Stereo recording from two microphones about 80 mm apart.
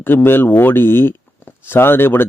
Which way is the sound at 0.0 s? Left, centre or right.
Left.